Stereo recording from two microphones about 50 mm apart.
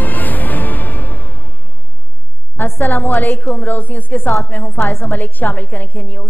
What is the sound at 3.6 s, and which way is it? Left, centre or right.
A woman's voice, left.